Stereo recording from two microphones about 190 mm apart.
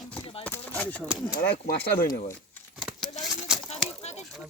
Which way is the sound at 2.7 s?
Centre (ahead or behind).